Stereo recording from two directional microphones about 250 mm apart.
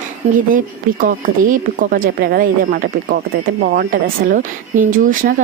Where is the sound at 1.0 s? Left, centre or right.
Right.